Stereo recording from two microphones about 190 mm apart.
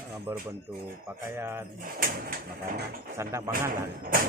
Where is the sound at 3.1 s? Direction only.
15° right (ahead or behind).